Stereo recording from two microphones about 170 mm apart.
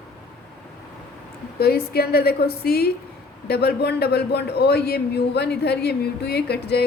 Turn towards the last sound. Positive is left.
turn(degrees=75)  # may be behind; listen again after turning